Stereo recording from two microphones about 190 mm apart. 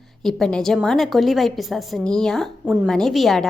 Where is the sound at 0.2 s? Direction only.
Centre (ahead or behind).